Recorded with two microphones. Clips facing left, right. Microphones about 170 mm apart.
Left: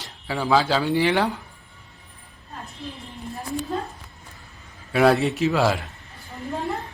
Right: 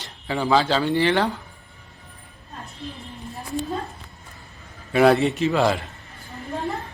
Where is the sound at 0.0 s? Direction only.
Centre (ahead or behind).